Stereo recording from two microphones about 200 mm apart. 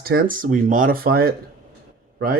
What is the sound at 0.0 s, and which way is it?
Speech, 50° right (ahead or behind).